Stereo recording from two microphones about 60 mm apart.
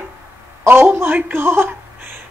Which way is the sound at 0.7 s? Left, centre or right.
Right.